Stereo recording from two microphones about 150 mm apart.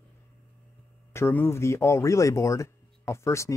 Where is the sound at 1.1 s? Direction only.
15° left (ahead or behind).